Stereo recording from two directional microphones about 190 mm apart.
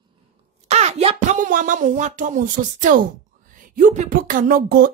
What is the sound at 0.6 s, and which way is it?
Speech, 35° right (ahead or behind).